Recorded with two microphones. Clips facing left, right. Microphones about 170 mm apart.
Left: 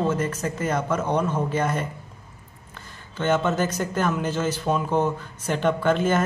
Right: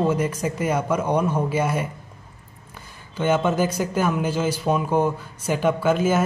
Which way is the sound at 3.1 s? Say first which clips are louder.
Right 2 dB; 10° right (ahead or behind).